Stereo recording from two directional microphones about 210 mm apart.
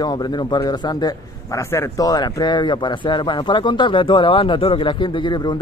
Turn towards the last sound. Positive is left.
turn(degrees=20)  # may be behind; listen again after turning